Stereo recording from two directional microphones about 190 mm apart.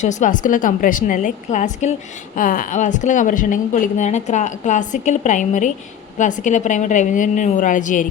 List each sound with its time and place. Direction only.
0.0 s a woman's voice: 40° left (ahead or behind)